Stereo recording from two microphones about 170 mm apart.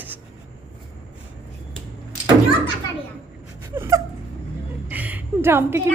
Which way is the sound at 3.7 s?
15° right (ahead or behind).